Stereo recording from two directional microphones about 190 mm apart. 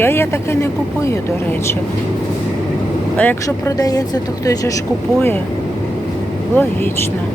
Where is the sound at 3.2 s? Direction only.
10° left (ahead or behind).